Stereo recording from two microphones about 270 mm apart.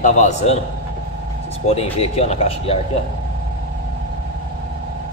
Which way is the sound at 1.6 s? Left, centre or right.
Left.